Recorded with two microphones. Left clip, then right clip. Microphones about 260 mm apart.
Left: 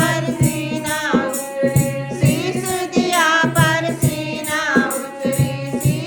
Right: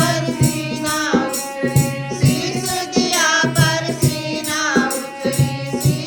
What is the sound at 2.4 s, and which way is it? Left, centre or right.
Music, left.